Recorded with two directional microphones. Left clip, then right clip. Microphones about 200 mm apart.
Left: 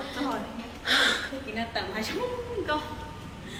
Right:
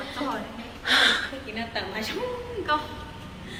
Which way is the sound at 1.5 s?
35° left (ahead or behind).